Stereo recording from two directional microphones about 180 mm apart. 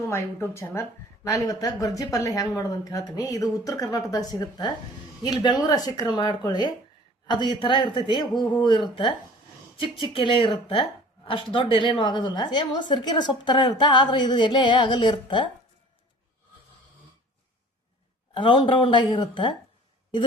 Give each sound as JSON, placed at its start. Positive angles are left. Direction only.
{"t": 0.1, "sound": "a woman's voice", "side_deg": 15}
{"t": 18.3, "sound": "a woman's voice", "side_deg": 25}